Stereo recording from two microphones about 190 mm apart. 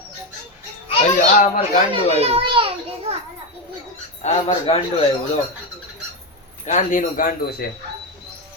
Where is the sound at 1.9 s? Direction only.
30° right (ahead or behind).